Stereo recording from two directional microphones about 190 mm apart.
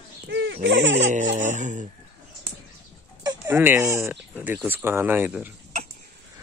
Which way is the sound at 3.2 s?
10° right (ahead or behind).